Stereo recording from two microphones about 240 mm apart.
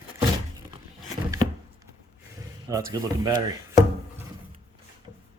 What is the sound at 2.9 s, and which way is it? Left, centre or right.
Speech, centre.